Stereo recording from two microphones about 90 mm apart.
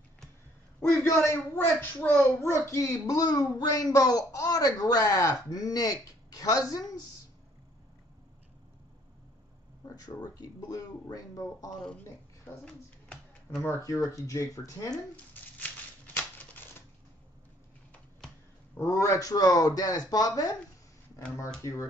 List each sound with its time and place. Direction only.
0.7 s a man's voice: 30° left (ahead or behind)
2.5 s speech: 35° left (ahead or behind)
9.8 s a sound: 45° left (ahead or behind)
10.2 s speech: 45° left (ahead or behind)
13.8 s speech: 35° left (ahead or behind)
16.1 s a sound: 25° left (ahead or behind)
18.8 s speech: 35° left (ahead or behind)
21.5 s speech: 30° left (ahead or behind)